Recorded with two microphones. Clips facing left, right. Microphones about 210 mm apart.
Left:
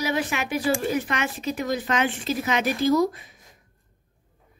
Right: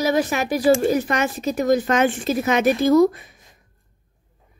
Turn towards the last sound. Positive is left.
turn(degrees=-50)  # may be behind; listen again after turning